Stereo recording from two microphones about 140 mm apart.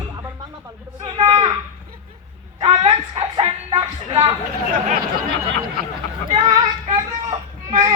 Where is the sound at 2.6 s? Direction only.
45° right (ahead or behind).